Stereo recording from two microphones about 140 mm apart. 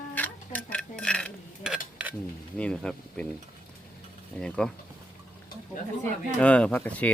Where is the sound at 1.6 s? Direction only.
10° right (ahead or behind).